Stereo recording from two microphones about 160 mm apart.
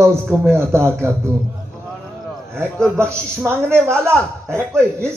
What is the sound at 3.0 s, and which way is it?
Speech, 15° right (ahead or behind).